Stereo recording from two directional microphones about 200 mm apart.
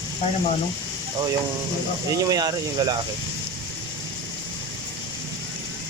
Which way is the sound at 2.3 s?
20° right (ahead or behind).